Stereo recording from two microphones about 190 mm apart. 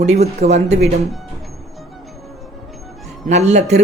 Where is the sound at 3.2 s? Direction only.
35° right (ahead or behind).